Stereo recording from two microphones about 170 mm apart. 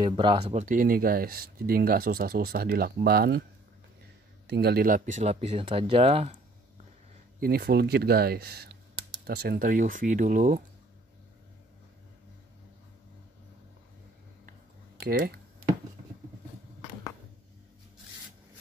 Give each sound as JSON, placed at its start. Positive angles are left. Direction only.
{"t": 0.0, "sound": "speech", "side_deg": -30}
{"t": 0.5, "sound": "speech", "side_deg": -45}
{"t": 4.5, "sound": "speech", "side_deg": -70}
{"t": 7.3, "sound": "speech", "side_deg": -65}
{"t": 15.0, "sound": "speech", "side_deg": -60}